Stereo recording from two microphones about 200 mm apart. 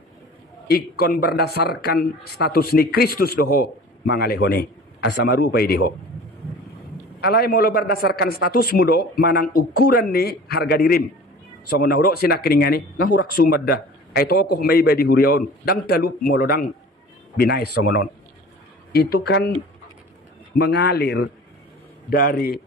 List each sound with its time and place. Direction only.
0.7 s speech: 50° left (ahead or behind)
7.2 s speech: 50° left (ahead or behind)
20.5 s speech: 55° left (ahead or behind)